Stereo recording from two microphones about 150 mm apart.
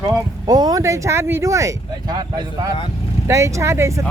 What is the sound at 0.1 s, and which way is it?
Speech, 25° right (ahead or behind).